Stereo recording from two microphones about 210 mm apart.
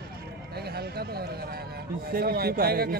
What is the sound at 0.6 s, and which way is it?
Speech, 50° right (ahead or behind).